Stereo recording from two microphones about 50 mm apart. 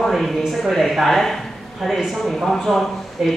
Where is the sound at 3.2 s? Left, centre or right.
Centre.